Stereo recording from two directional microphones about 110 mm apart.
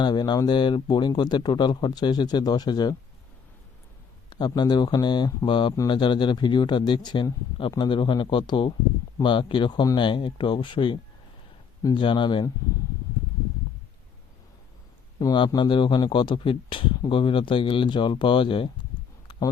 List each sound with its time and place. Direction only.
0.0 s speech: 40° left (ahead or behind)
4.3 s speech: 40° left (ahead or behind)
11.9 s speech: 50° left (ahead or behind)
15.2 s speech: 35° left (ahead or behind); by 18.7 s 50° left (ahead or behind)